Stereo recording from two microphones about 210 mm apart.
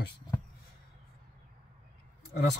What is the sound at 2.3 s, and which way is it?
Speech, 55° left (ahead or behind).